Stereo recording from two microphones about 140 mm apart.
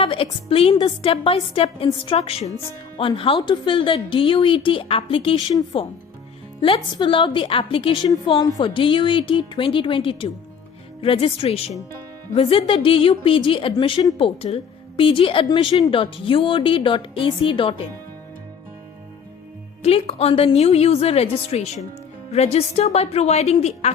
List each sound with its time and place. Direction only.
0.0 s a woman's voice: 40° left (ahead or behind)
19.8 s a woman's voice: 45° left (ahead or behind)